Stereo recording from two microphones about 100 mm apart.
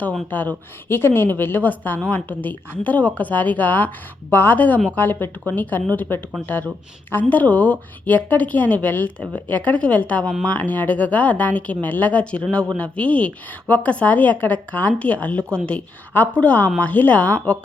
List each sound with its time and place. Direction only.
0.3 s speech: 20° left (ahead or behind)